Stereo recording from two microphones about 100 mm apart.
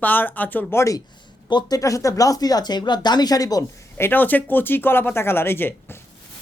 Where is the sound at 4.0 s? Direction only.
20° left (ahead or behind).